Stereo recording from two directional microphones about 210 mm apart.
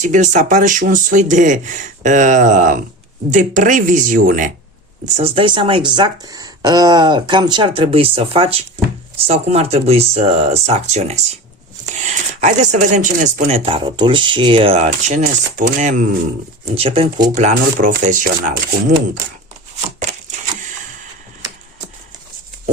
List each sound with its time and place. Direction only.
0.0 s speech: 35° right (ahead or behind)
5.0 s speech: 30° right (ahead or behind)
17.3 s speech: 35° right (ahead or behind)